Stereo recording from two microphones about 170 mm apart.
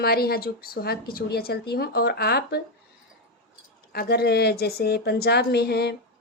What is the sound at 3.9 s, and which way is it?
Speech, 70° left (ahead or behind).